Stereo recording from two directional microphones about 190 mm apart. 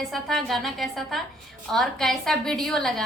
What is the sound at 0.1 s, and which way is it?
A woman's voice, centre (ahead or behind).